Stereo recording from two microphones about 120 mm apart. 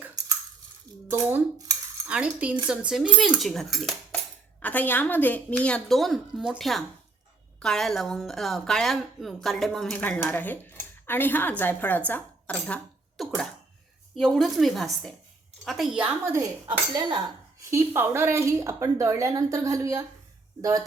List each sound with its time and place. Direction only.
1.1 s dishes: 15° right (ahead or behind)
2.0 s a woman's voice: 10° right (ahead or behind)
4.6 s a woman's voice: 15° left (ahead or behind)
10.0 s a woman's voice: 15° left (ahead or behind); by 16.1 s 5° right (ahead or behind)
16.2 s speech: 25° right (ahead or behind)
17.6 s speech: 25° right (ahead or behind)